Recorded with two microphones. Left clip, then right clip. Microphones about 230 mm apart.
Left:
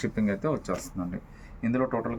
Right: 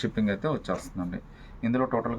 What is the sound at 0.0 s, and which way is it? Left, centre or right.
Speech, centre.